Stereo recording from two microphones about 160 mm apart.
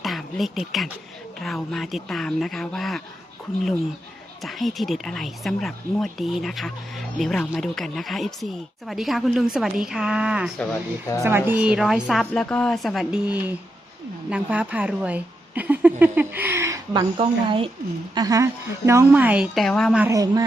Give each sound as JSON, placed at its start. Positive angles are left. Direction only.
{"t": 0.0, "sound": "a woman's voice", "side_deg": 0}
{"t": 4.4, "sound": "a woman's voice", "side_deg": 0}
{"t": 17.2, "sound": "a woman's voice", "side_deg": -35}
{"t": 18.1, "sound": "a woman's voice", "side_deg": -20}
{"t": 20.0, "sound": "speech", "side_deg": -20}